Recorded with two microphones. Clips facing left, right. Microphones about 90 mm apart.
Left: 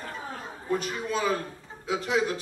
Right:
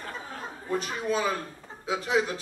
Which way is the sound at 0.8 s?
20° right (ahead or behind).